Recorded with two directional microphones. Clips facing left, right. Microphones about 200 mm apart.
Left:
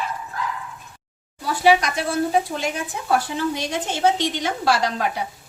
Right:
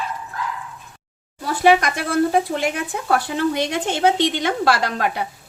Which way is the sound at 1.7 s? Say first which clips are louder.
Right 2 dB; 55° right (ahead or behind).